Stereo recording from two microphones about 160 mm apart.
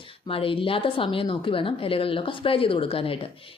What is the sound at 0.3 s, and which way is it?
A woman's voice, 35° left (ahead or behind).